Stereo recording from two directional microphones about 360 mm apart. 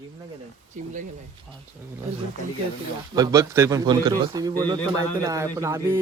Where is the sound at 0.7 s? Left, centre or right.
Centre.